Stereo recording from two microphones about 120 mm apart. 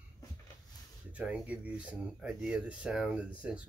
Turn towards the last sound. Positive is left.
turn(degrees=-10)  # may be behind; listen again after turning